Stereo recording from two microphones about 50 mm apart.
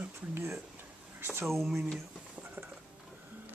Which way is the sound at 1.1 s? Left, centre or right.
Right.